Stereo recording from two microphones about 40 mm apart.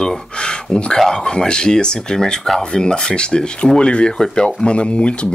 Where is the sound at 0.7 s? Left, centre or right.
Left.